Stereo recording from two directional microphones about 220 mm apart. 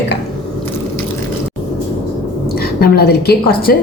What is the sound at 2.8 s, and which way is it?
Speech, 45° left (ahead or behind).